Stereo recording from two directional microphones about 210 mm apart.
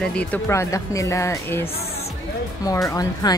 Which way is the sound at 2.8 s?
15° left (ahead or behind).